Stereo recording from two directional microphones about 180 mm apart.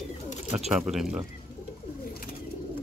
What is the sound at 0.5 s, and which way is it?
Speech, 5° right (ahead or behind).